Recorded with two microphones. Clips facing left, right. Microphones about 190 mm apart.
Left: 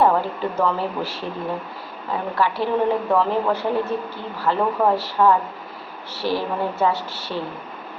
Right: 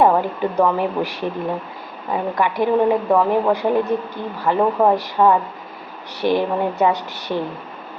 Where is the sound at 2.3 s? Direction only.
15° right (ahead or behind).